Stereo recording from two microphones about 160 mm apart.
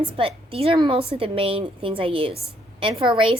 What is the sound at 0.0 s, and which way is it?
A woman's voice, 35° right (ahead or behind).